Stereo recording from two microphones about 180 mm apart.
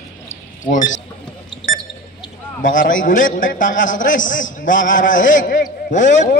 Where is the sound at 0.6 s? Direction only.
45° left (ahead or behind).